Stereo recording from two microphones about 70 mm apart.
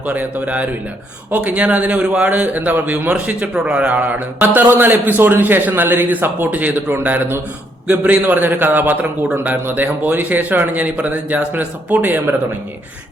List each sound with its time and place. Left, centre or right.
0.0 s a man's voice: right